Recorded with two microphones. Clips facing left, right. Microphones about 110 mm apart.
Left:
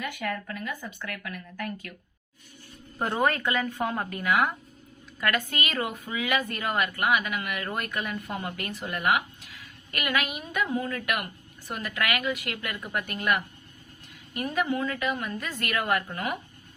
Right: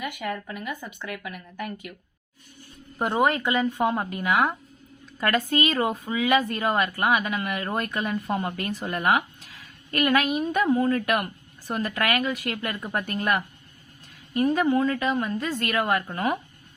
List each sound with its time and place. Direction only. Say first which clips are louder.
0.0 s speech: right 1 dB; 15° right (ahead or behind)
3.0 s a woman's voice: right 3 dB; 20° right (ahead or behind)